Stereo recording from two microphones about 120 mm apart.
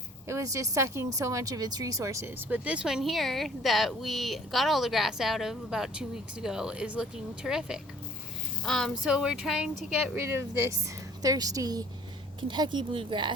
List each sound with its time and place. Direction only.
0.3 s speech: 25° right (ahead or behind)
2.5 s a woman's voice: 10° right (ahead or behind)
10.2 s speech: 20° right (ahead or behind); by 13.3 s 45° right (ahead or behind)